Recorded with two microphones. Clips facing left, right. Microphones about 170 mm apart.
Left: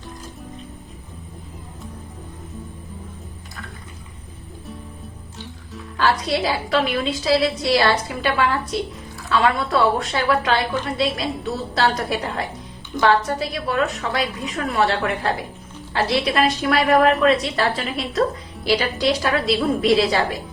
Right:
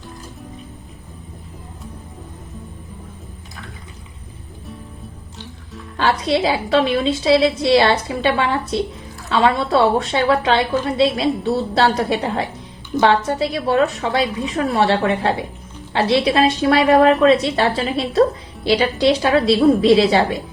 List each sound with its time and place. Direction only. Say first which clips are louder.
6.2 s a woman's voice: right 4 dB; 25° right (ahead or behind)